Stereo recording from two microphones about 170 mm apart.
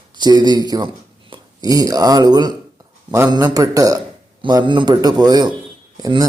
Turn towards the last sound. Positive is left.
turn(degrees=-25)  # may be behind; listen again after turning